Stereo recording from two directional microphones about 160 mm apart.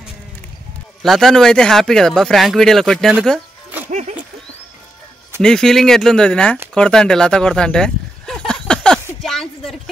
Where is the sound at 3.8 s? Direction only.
50° right (ahead or behind).